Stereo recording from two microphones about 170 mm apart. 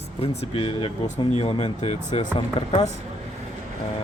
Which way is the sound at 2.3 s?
30° left (ahead or behind).